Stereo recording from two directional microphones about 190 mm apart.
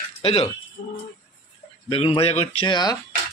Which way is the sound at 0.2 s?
30° left (ahead or behind).